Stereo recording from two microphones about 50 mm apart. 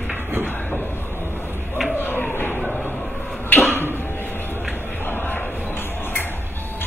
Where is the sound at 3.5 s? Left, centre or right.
Left.